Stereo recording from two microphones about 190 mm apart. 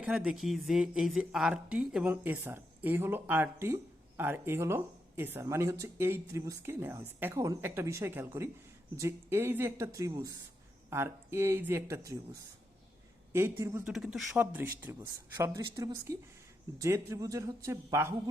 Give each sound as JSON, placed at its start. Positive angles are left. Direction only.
{"t": 0.0, "sound": "speech", "side_deg": -5}